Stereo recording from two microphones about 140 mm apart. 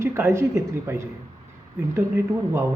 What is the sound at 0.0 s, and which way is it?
Speech, 20° right (ahead or behind).